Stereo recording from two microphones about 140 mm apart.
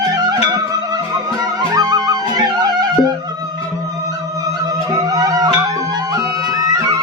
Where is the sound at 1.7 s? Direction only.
30° right (ahead or behind).